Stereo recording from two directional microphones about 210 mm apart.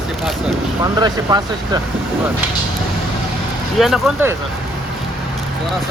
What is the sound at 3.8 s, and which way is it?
Speech, centre (ahead or behind).